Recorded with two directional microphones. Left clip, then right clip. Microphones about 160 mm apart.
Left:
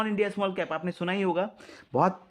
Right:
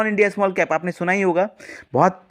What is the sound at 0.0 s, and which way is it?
Speech, 25° right (ahead or behind).